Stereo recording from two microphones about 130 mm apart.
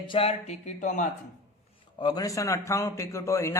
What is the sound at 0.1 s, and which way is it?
Speech, 50° left (ahead or behind).